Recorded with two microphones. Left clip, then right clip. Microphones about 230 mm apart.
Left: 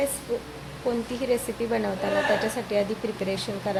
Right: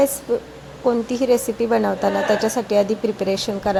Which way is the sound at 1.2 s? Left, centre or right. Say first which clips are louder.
Right 8 dB; right.